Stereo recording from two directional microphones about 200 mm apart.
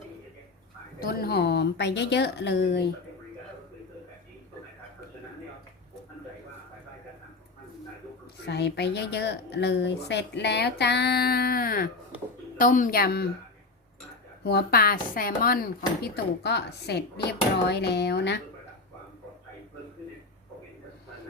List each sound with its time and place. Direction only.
1.0 s speech: 50° left (ahead or behind)
8.4 s speech: 60° left (ahead or behind)
14.4 s speech: 50° left (ahead or behind)